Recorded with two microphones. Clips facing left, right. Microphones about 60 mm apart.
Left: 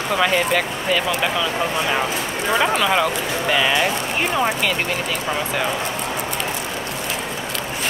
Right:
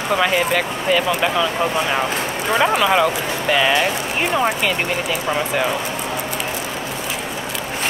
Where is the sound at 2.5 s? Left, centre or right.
Centre.